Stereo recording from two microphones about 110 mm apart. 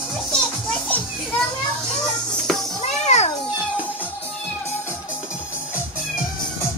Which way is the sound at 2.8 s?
90° left.